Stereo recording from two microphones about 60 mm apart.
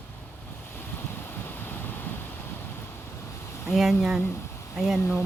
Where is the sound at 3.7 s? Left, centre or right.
Centre.